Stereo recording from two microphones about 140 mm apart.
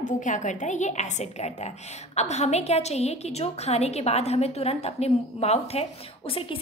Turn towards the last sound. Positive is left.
turn(degrees=40)  # may be behind; listen again after turning